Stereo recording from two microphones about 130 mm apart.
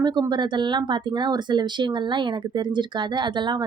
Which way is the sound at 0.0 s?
35° right (ahead or behind).